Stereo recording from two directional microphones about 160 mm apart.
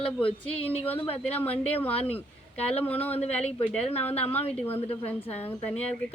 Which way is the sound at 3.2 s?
40° left (ahead or behind).